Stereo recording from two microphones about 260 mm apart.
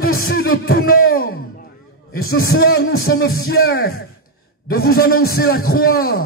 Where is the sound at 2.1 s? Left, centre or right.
Left.